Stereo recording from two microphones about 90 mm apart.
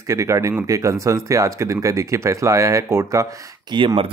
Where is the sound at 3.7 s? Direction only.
65° right (ahead or behind).